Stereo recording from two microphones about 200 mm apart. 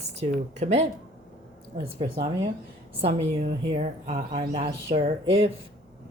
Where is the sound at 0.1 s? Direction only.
35° right (ahead or behind).